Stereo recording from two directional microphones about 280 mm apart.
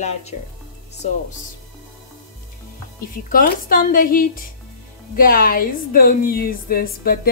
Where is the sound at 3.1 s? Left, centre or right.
Left.